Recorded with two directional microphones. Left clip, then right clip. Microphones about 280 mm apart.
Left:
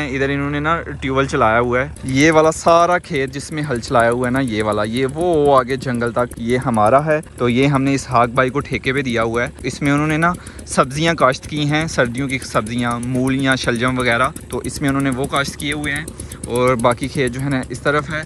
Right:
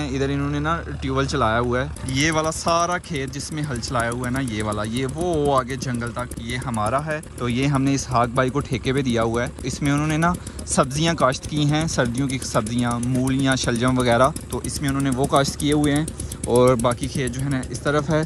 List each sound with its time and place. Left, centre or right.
0.3 s speech: centre
5.9 s speech: centre